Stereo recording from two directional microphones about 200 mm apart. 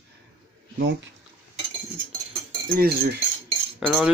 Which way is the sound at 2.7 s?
50° right (ahead or behind).